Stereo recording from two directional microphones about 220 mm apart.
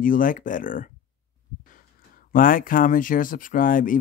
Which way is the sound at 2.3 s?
40° left (ahead or behind).